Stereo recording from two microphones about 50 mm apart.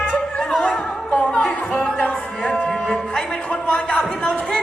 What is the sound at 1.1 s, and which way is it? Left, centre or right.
Music, left.